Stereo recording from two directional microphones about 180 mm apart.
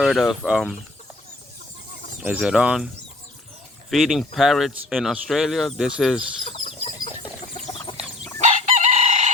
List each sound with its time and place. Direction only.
0.0 s speech: centre (ahead or behind)
2.2 s speech: 5° right (ahead or behind)
6.4 s chicken: 30° left (ahead or behind)
7.9 s dog: 25° left (ahead or behind)
8.4 s chicken: 40° right (ahead or behind)